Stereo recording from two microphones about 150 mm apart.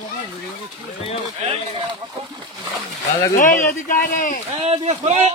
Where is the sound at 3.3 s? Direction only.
60° left (ahead or behind).